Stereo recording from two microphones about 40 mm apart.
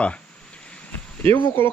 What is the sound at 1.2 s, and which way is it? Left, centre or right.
Speech, left.